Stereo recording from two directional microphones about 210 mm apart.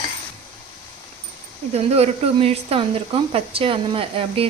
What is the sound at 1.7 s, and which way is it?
Speech, 30° right (ahead or behind).